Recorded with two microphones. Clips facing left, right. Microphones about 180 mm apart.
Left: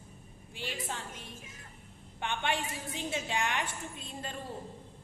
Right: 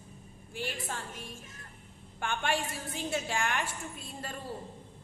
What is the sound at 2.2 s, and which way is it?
A woman's voice, 20° left (ahead or behind).